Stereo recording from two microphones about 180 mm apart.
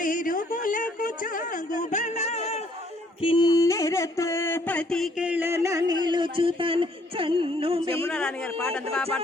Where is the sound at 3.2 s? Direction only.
25° left (ahead or behind); by 8.0 s 30° right (ahead or behind).